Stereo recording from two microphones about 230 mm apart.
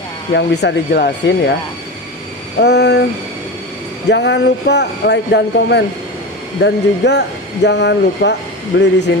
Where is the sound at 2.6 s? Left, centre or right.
Left.